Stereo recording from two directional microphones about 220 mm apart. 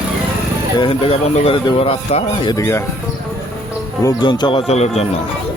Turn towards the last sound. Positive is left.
turn(degrees=30)  # may be behind; listen again after turning